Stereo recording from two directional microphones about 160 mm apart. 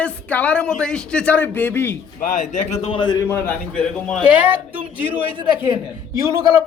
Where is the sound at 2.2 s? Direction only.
55° left (ahead or behind).